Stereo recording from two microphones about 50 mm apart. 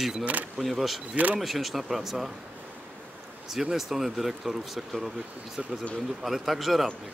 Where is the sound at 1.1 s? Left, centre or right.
Right.